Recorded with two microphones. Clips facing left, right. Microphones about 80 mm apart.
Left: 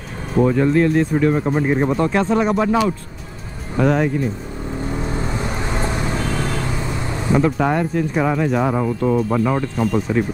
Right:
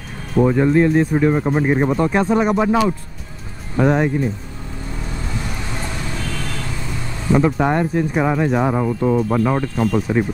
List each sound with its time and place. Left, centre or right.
0.4 s speech: centre
3.8 s speech: centre
4.9 s vehicle: left
7.3 s speech: centre